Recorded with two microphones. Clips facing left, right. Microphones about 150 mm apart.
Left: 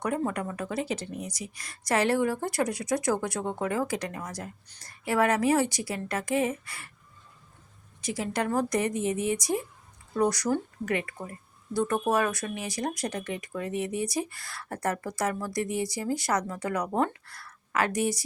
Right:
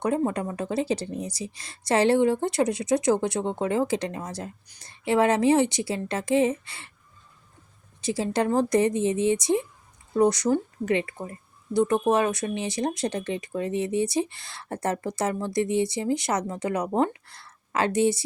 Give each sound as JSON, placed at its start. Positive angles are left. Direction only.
{"t": 0.0, "sound": "a woman's voice", "side_deg": -25}
{"t": 8.0, "sound": "a woman's voice", "side_deg": -30}